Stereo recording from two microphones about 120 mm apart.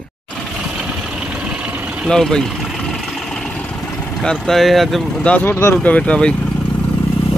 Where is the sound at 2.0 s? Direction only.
5° left (ahead or behind).